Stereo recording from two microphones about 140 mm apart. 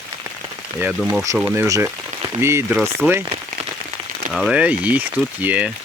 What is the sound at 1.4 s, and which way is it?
Speech, 20° right (ahead or behind).